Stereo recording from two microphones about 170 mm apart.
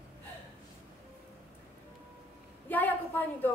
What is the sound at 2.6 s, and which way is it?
Speech, 10° left (ahead or behind).